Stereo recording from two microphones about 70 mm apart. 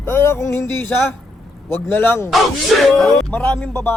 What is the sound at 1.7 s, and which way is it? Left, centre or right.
Music, left.